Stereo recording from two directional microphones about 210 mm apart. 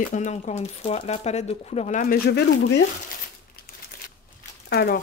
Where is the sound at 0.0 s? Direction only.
35° left (ahead or behind); by 2.8 s 50° left (ahead or behind).